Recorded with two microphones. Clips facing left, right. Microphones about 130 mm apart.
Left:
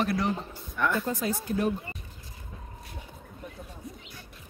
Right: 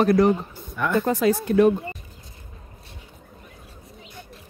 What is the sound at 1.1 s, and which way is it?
Speech, 75° right (ahead or behind).